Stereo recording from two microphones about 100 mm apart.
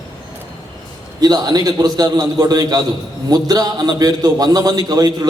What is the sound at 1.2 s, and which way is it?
A man's voice, 40° right (ahead or behind).